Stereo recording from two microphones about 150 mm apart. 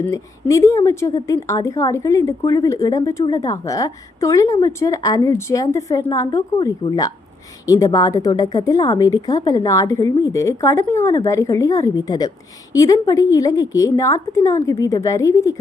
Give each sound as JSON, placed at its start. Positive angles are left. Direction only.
{"t": 0.0, "sound": "a woman's voice", "side_deg": 20}